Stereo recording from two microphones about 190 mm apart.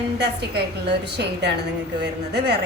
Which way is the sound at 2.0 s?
60° right (ahead or behind).